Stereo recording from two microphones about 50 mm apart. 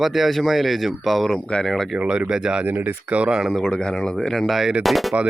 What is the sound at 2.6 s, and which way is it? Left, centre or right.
Speech, right.